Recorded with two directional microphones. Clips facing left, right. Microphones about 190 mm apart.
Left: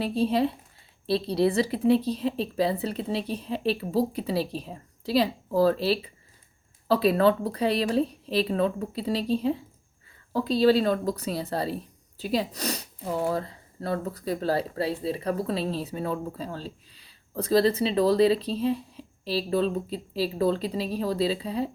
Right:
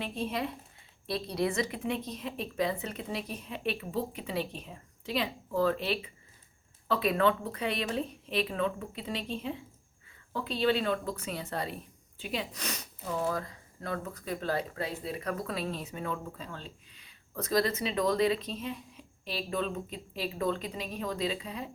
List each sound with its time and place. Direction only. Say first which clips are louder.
0.0 s speech: left 10 dB; 35° left (ahead or behind)